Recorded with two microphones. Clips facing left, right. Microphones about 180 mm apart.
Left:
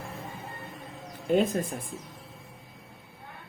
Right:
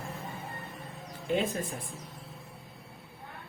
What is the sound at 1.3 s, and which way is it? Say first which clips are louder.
Speech: left 5 dB; 45° left (ahead or behind).